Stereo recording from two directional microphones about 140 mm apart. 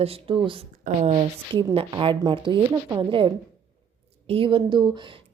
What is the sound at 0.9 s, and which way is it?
Speech, 75° right (ahead or behind).